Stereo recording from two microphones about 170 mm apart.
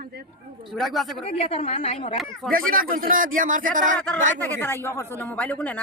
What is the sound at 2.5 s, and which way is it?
Speech, 55° right (ahead or behind).